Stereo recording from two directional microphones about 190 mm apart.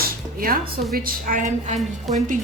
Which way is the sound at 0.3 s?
50° right (ahead or behind).